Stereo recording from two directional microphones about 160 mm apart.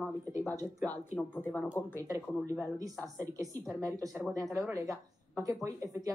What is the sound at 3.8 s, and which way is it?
Speech, 20° right (ahead or behind).